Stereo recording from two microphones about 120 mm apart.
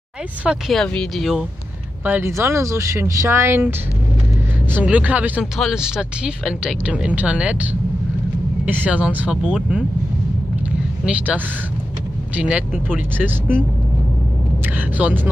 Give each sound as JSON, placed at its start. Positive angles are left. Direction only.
{"t": 0.4, "sound": "speech", "side_deg": -10}
{"t": 2.0, "sound": "speech", "side_deg": -15}
{"t": 4.7, "sound": "speech", "side_deg": -10}
{"t": 8.6, "sound": "speech", "side_deg": -15}
{"t": 11.1, "sound": "speech", "side_deg": -10}
{"t": 15.0, "sound": "speech", "side_deg": -15}